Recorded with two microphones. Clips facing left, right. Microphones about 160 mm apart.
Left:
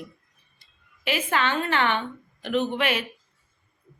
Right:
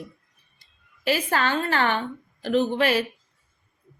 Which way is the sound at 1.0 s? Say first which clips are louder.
Right 2 dB; 40° right (ahead or behind).